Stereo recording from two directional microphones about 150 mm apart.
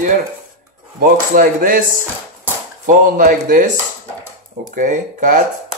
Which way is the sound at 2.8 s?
65° right (ahead or behind).